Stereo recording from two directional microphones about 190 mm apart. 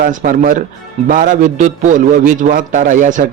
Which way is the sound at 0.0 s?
45° right (ahead or behind).